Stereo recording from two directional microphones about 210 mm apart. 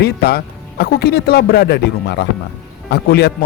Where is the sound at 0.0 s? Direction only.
50° left (ahead or behind).